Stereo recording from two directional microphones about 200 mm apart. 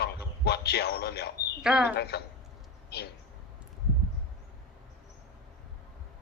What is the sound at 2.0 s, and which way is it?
Speech, 55° left (ahead or behind).